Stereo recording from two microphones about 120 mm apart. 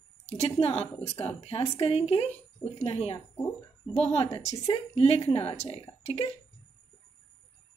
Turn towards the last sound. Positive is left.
turn(degrees=60)  # may be behind; listen again after turning